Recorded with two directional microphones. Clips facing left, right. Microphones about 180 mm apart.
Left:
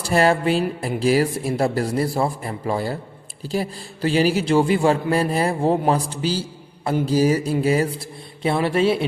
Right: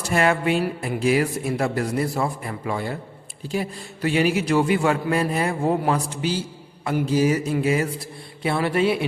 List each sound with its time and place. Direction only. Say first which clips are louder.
0.0 s a man's voice: left 3 dB; 35° left (ahead or behind)